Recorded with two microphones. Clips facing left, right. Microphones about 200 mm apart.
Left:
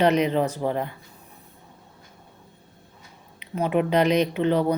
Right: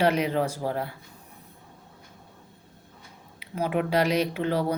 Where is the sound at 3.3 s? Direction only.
10° right (ahead or behind).